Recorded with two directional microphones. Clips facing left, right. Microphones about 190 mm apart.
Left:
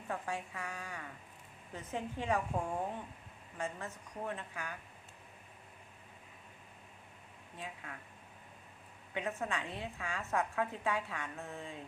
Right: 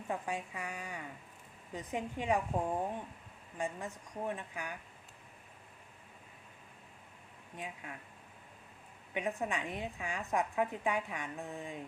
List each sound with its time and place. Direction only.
0.1 s a woman's voice: 15° right (ahead or behind)
7.5 s a woman's voice: 15° right (ahead or behind)
9.1 s a woman's voice: 15° right (ahead or behind)